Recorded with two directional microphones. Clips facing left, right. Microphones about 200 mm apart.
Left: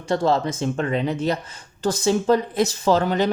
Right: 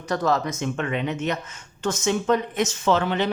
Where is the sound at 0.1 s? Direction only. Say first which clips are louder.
Left 3 dB; 30° left (ahead or behind).